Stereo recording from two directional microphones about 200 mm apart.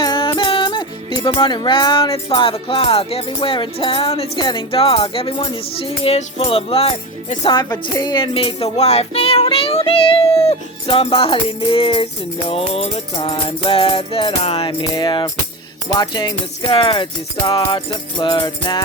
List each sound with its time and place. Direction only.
0.0 s music: 25° left (ahead or behind)
6.0 s speech: 30° left (ahead or behind)